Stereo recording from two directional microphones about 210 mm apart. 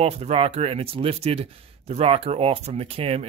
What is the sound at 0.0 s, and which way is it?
Speech, 30° right (ahead or behind).